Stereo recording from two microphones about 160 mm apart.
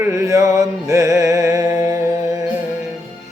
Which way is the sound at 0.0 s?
20° right (ahead or behind).